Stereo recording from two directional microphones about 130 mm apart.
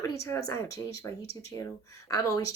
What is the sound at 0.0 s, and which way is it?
Speech, 25° left (ahead or behind).